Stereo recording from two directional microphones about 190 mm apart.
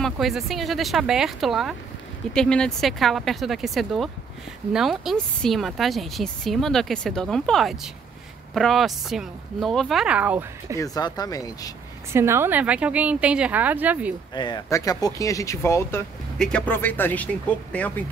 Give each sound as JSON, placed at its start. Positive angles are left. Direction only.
{"t": 0.0, "sound": "speech", "side_deg": 0}
{"t": 10.8, "sound": "speech", "side_deg": 20}
{"t": 12.1, "sound": "a woman's voice", "side_deg": -15}
{"t": 14.3, "sound": "speech", "side_deg": 25}